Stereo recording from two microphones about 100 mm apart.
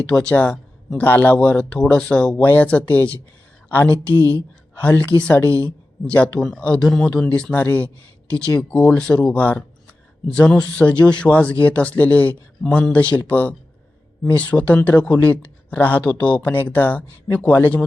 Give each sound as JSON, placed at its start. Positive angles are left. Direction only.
{"t": 0.0, "sound": "speech", "side_deg": 10}
{"t": 3.8, "sound": "speech", "side_deg": -30}
{"t": 4.8, "sound": "speech", "side_deg": 15}
{"t": 5.5, "sound": "speech", "side_deg": -30}
{"t": 6.1, "sound": "speech", "side_deg": 10}